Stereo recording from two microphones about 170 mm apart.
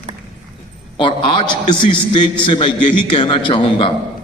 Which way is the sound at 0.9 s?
30° left (ahead or behind).